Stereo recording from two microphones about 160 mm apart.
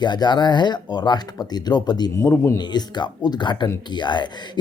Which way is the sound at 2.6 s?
25° left (ahead or behind).